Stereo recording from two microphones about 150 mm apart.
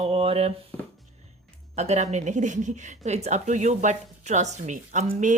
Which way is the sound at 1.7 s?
50° right (ahead or behind).